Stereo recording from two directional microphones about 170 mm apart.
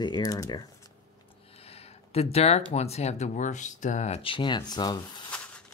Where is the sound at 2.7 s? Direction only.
40° left (ahead or behind).